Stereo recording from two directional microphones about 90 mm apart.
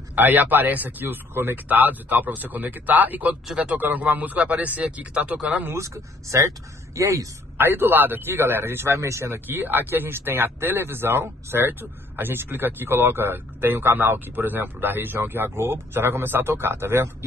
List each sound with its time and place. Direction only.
0.1 s a man's voice: 20° right (ahead or behind)
5.7 s speech: 35° right (ahead or behind)
7.5 s a man's voice: 25° right (ahead or behind)